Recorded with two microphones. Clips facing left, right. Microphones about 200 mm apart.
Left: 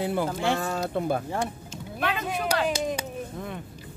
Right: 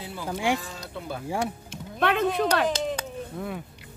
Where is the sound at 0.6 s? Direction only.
55° left (ahead or behind).